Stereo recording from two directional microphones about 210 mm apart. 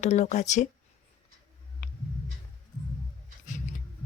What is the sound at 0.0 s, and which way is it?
Speech, 35° left (ahead or behind).